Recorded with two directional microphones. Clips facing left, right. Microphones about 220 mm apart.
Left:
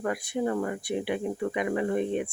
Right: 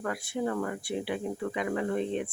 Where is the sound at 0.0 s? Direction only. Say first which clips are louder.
Left 3 dB; 20° left (ahead or behind).